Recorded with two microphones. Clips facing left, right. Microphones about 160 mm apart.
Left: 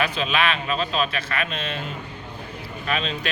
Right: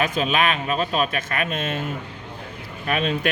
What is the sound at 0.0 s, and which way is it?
Speech, 45° right (ahead or behind).